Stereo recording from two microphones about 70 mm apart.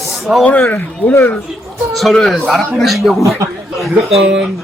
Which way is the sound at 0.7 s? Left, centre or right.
Left.